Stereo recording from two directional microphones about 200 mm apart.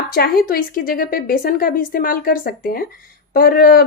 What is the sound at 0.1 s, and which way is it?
A woman's voice, 50° left (ahead or behind).